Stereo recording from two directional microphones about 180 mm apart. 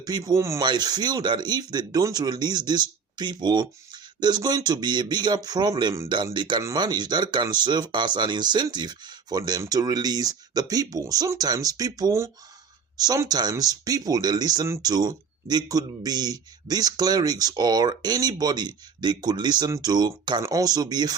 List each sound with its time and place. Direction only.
0.0 s speech: 20° right (ahead or behind)